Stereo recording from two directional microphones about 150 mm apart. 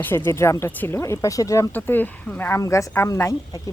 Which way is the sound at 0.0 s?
15° left (ahead or behind).